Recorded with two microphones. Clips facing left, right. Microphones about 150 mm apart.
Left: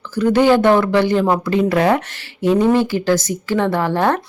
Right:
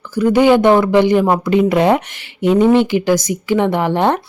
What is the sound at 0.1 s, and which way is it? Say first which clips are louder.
A woman's voice: right 2 dB; 10° right (ahead or behind).